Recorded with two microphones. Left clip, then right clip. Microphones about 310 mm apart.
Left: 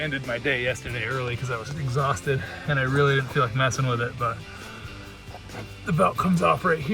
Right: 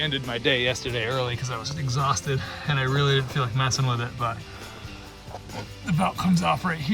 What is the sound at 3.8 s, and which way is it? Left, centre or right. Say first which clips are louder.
Speech: left 2 dB; right.